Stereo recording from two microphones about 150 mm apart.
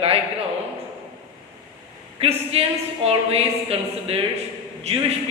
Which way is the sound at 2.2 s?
40° right (ahead or behind).